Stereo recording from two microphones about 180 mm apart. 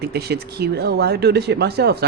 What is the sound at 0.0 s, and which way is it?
Speech, 60° right (ahead or behind).